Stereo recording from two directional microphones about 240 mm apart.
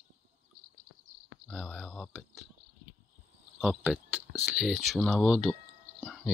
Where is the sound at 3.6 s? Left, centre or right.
Centre.